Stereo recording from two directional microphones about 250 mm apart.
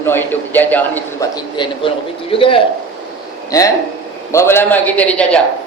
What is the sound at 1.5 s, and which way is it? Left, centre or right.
A man's voice, centre.